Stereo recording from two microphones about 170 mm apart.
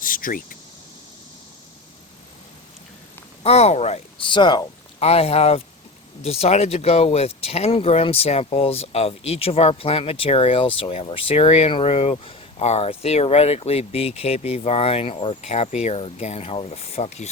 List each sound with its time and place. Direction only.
0.0 s vehicle: 55° left (ahead or behind)
3.4 s speech: 40° left (ahead or behind)
4.9 s speech: 35° left (ahead or behind)